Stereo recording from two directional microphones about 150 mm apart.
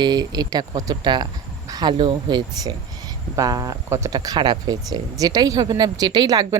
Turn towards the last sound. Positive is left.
turn(degrees=-25)  # may be behind; listen again after turning